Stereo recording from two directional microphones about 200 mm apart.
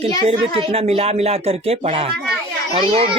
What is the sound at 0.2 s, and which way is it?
Speech, 30° right (ahead or behind).